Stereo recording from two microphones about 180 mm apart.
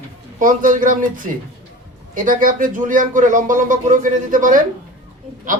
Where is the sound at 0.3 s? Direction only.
45° right (ahead or behind).